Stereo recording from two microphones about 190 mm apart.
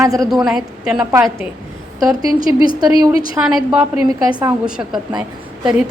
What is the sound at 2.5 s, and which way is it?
A woman's voice, 10° right (ahead or behind).